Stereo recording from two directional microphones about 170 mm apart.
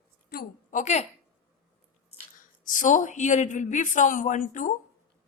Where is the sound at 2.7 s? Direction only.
50° left (ahead or behind).